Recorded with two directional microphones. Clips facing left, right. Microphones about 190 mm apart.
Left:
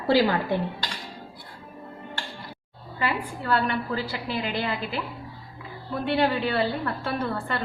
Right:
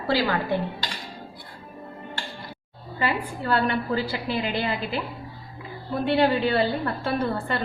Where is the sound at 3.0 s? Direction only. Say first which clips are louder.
Right 2 dB; 25° right (ahead or behind).